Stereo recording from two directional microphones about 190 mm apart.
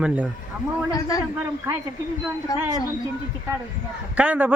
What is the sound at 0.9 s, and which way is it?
Speech, 20° left (ahead or behind).